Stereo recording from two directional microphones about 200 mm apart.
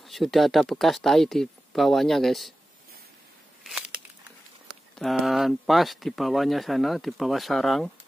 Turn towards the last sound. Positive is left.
turn(degrees=0)  # may be behind; listen again after turning